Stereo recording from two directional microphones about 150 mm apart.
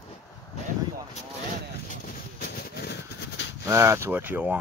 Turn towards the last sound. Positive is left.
turn(degrees=-10)  # may be behind; listen again after turning